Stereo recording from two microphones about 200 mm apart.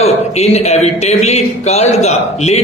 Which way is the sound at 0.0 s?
30° left (ahead or behind).